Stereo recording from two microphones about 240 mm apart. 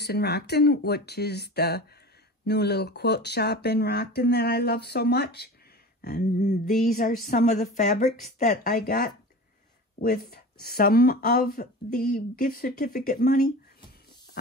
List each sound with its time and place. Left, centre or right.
0.0 s speech: left